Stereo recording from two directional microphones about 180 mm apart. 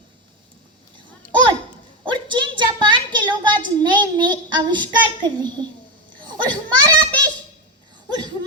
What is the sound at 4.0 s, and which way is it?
A woman's voice, 25° right (ahead or behind).